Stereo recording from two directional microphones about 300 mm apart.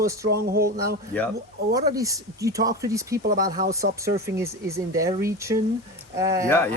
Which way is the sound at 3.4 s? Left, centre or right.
Right.